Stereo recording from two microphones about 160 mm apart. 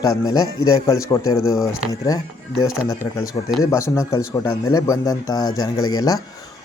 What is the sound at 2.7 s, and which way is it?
Speech, 15° left (ahead or behind).